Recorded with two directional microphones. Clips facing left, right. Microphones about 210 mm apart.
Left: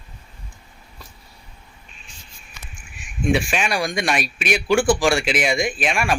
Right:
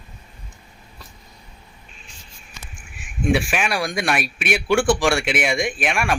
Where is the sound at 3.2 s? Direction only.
5° right (ahead or behind).